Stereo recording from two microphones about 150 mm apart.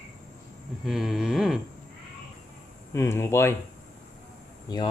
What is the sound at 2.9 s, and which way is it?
Speech, 15° left (ahead or behind).